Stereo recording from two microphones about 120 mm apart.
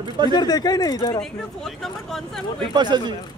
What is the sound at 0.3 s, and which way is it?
Speech, 35° left (ahead or behind).